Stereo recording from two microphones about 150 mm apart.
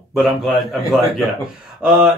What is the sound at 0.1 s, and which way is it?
Speech, centre (ahead or behind).